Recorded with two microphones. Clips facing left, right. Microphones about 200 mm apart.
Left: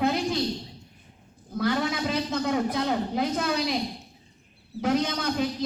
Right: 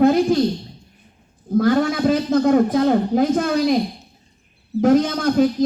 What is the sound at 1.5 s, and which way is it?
Speech, 50° right (ahead or behind).